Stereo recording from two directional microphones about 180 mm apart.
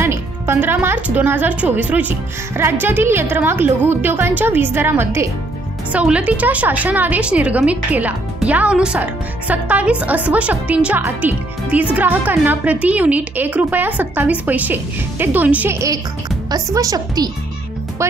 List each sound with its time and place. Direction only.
0.0 s a woman's voice: 15° right (ahead or behind)